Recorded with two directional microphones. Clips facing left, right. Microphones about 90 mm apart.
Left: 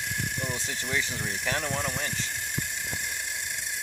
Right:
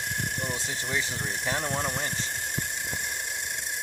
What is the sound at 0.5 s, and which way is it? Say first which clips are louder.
Speech: even; 30° right (ahead or behind).